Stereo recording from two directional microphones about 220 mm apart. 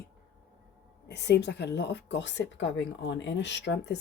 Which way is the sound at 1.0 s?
50° left (ahead or behind).